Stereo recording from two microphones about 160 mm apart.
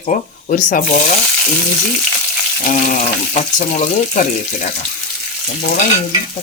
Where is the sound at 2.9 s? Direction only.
50° left (ahead or behind).